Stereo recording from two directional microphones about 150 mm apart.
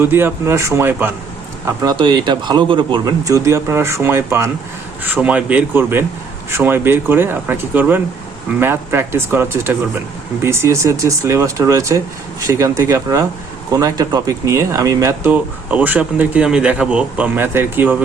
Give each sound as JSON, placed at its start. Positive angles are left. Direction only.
{"t": 0.0, "sound": "speech", "side_deg": -15}
{"t": 1.6, "sound": "speech", "side_deg": -25}